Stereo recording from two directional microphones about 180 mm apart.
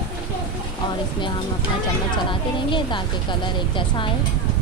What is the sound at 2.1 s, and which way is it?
Speech, 25° left (ahead or behind).